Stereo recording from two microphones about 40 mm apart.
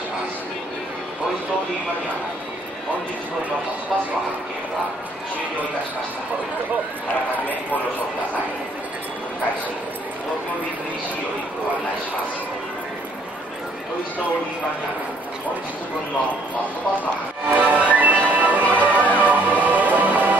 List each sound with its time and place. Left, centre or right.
17.6 s music: right